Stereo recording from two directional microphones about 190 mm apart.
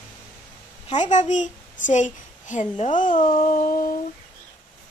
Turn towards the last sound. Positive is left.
turn(degrees=45)  # may be behind; listen again after turning